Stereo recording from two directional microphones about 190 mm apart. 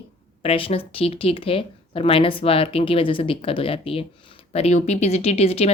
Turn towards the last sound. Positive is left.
turn(degrees=30)  # may be behind; listen again after turning